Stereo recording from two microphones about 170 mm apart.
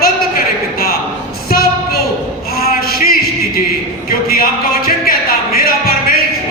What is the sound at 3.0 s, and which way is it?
Music, 60° left (ahead or behind).